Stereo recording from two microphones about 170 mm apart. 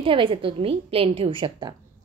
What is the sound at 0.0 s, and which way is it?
A woman's voice, 30° right (ahead or behind).